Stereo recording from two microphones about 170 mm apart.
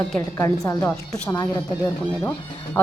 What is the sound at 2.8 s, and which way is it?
Speech, 10° left (ahead or behind).